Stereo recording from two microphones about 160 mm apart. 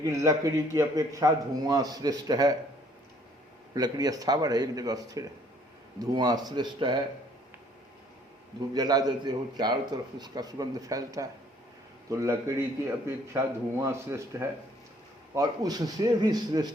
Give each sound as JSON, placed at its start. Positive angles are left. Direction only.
{"t": 0.0, "sound": "a man's voice", "side_deg": -20}
{"t": 3.8, "sound": "a man's voice", "side_deg": -25}
{"t": 8.7, "sound": "a man's voice", "side_deg": -25}